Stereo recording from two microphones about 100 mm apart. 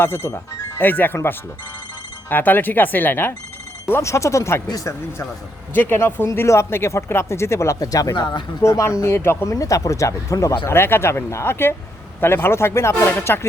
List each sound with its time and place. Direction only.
0.0 s speech: 25° left (ahead or behind)
5.7 s speech: 20° left (ahead or behind); by 8.4 s 45° left (ahead or behind)
8.6 s speech: 30° left (ahead or behind)